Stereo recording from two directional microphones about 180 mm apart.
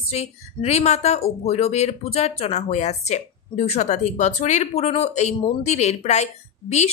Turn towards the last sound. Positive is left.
turn(degrees=40)  # may be behind; listen again after turning